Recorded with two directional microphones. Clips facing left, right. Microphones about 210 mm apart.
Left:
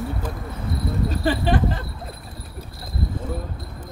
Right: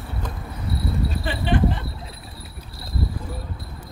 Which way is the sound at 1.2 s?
40° left (ahead or behind).